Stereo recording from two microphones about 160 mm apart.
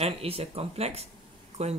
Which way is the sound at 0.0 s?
40° right (ahead or behind).